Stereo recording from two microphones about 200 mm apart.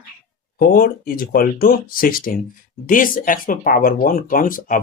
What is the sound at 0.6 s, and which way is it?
Speech, 45° left (ahead or behind).